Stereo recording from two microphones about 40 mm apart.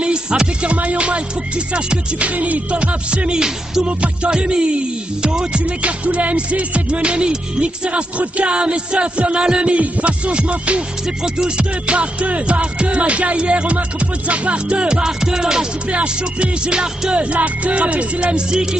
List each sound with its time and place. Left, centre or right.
0.0 s music: right
11.2 s music: centre
15.9 s music: right
17.4 s music: right; by 18.8 s centre